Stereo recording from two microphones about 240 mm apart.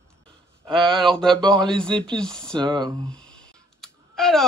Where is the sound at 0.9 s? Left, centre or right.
Centre.